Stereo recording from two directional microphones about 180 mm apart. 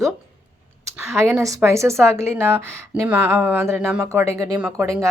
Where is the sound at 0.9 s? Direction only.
15° right (ahead or behind).